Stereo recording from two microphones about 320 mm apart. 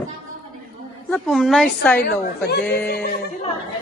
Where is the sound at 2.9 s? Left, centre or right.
Left.